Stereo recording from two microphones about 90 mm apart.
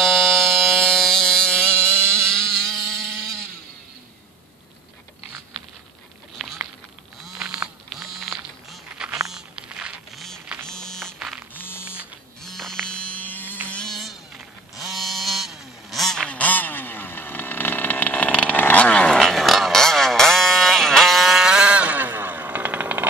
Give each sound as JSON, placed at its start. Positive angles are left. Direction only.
{"t": 0.0, "sound": "music", "side_deg": 0}
{"t": 2.3, "sound": "a sound", "side_deg": 5}
{"t": 6.3, "sound": "a sound", "side_deg": 0}
{"t": 10.1, "sound": "music", "side_deg": 5}
{"t": 11.5, "sound": "hum", "side_deg": 25}
{"t": 11.8, "sound": "printer", "side_deg": -15}
{"t": 12.4, "sound": "insect", "side_deg": 5}
{"t": 13.7, "sound": "buzz", "side_deg": 5}
{"t": 14.8, "sound": "vehicle", "side_deg": 0}
{"t": 19.1, "sound": "a sound", "side_deg": 5}